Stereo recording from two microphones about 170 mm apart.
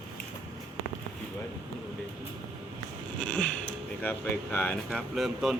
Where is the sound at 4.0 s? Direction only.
10° left (ahead or behind).